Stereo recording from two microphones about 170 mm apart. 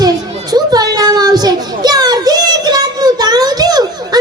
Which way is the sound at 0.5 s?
25° right (ahead or behind).